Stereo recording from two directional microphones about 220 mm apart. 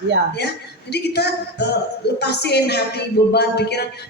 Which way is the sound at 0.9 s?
50° left (ahead or behind).